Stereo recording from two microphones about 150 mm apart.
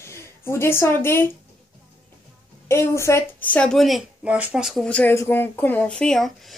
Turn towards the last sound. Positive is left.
turn(degrees=0)  # may be behind; listen again after turning